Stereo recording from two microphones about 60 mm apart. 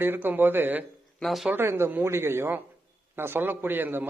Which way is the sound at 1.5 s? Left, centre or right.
Right.